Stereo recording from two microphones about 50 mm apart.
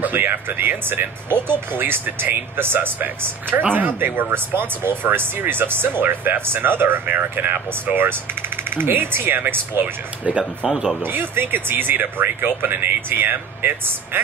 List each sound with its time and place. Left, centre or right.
0.0 s speech: right
10.3 s speech: right
10.7 s speech: centre
11.0 s speech: right